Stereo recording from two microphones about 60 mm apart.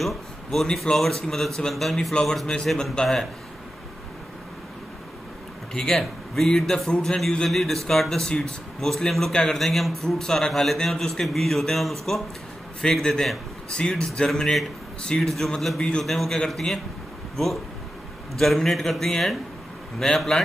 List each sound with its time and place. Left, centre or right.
0.0 s a man's voice: centre
5.7 s a man's voice: centre
18.4 s a man's voice: centre